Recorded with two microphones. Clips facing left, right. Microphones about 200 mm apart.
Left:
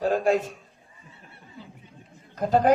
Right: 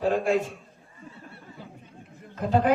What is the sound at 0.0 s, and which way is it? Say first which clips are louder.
Speech: left 1 dB; 40° left (ahead or behind).